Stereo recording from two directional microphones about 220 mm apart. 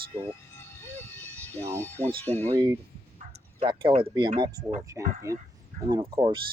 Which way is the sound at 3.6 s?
20° right (ahead or behind).